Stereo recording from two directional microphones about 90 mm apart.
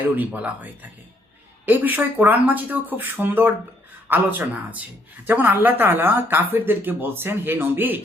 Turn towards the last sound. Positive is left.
turn(degrees=-20)  # may be behind; listen again after turning